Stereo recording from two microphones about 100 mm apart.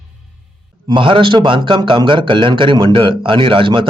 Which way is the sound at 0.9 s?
60° right (ahead or behind).